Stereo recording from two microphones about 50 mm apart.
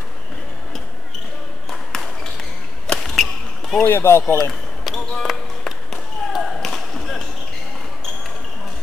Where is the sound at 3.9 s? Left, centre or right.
Left.